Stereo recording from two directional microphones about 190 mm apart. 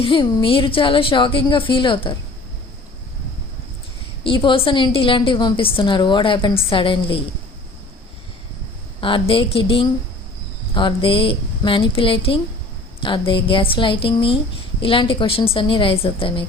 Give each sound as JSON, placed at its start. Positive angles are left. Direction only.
{"t": 0.0, "sound": "a woman's voice", "side_deg": 25}
{"t": 4.2, "sound": "a woman's voice", "side_deg": 25}
{"t": 9.0, "sound": "a woman's voice", "side_deg": 25}